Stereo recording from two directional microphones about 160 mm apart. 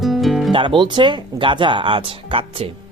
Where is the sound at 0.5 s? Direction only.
30° right (ahead or behind).